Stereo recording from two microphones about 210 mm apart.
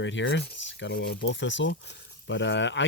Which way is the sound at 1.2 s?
60° left (ahead or behind).